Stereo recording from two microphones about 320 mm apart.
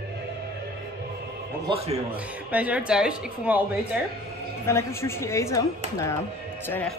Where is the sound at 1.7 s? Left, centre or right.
Centre.